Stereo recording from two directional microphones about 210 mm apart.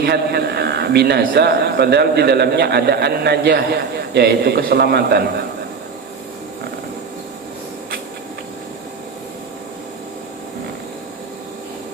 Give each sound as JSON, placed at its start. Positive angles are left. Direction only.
{"t": 0.0, "sound": "a man's voice", "side_deg": -50}